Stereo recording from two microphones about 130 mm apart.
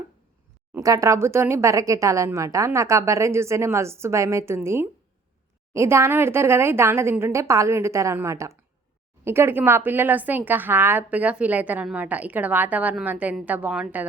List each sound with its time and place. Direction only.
0.8 s speech: 25° right (ahead or behind); by 14.1 s 10° right (ahead or behind)